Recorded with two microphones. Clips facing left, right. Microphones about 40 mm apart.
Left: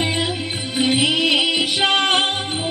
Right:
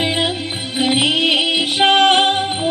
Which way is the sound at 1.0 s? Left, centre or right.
Right.